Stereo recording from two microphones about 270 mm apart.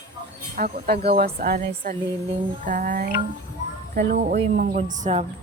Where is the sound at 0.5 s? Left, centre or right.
Right.